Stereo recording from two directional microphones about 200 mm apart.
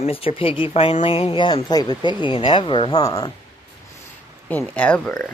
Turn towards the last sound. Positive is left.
turn(degrees=5)  # may be behind; listen again after turning